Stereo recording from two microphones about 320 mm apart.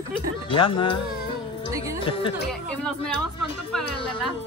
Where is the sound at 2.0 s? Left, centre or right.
Centre.